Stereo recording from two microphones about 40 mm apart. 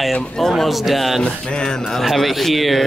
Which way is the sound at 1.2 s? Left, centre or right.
Left.